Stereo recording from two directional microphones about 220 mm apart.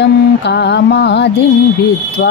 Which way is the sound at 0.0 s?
50° left (ahead or behind).